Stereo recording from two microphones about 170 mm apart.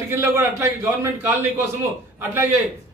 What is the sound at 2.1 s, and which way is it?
Speech, 15° right (ahead or behind).